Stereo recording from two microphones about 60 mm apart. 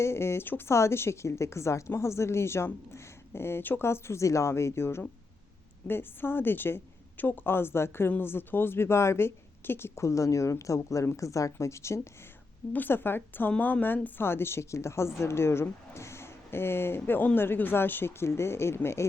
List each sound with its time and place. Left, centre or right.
0.0 s a woman's voice: left
11.6 s speech: left
12.7 s a woman's voice: left
13.5 s a woman's voice: left